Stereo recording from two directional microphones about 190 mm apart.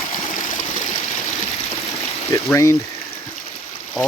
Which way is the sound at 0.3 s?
45° left (ahead or behind).